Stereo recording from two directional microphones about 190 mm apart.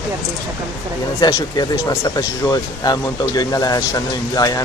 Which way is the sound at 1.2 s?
20° left (ahead or behind).